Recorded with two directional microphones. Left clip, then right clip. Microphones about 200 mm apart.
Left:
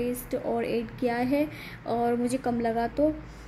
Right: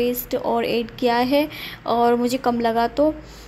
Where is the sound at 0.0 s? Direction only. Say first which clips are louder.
Right 8 dB; 5° right (ahead or behind).